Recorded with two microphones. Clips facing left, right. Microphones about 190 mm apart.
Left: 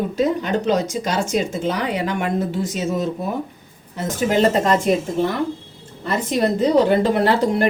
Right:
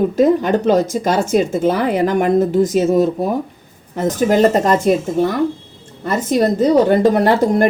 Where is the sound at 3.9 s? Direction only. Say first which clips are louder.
Right 5 dB; 45° right (ahead or behind).